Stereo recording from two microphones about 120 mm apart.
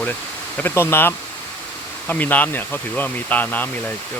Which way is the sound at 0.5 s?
20° left (ahead or behind).